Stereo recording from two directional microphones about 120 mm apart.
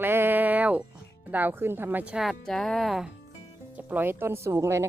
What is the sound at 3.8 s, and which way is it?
Speech, 15° right (ahead or behind).